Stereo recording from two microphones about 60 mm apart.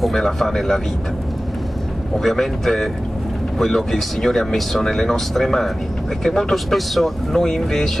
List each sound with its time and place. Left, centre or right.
0.0 s speech: centre
2.1 s speech: centre